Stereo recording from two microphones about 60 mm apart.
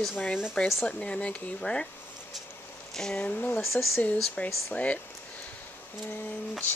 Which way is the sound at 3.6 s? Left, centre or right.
Centre.